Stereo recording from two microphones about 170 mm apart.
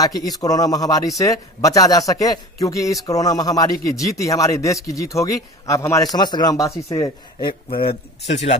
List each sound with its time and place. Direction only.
0.0 s a man's voice: 20° left (ahead or behind)